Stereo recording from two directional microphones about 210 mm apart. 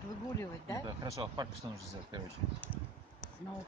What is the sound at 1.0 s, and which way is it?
Speech, 20° right (ahead or behind).